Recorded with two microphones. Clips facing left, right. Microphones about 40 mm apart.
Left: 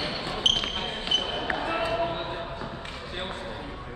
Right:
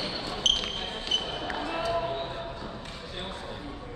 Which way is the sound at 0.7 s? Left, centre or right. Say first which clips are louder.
Left 3 dB; left.